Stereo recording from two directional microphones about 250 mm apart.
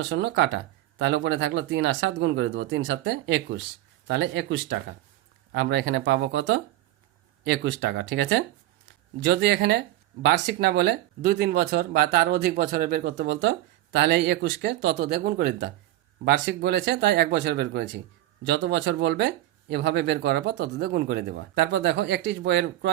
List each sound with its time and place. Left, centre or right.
0.0 s speech: right